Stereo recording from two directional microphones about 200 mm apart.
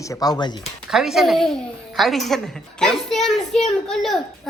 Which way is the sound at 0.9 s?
Centre (ahead or behind).